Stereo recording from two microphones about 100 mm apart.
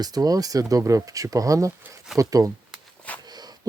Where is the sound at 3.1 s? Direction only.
15° left (ahead or behind).